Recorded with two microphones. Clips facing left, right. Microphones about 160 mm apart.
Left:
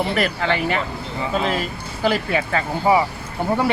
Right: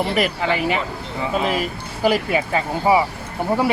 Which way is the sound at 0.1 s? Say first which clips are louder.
Right 1 dB; 10° right (ahead or behind).